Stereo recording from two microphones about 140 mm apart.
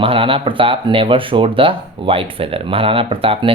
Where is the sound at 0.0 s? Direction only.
40° right (ahead or behind).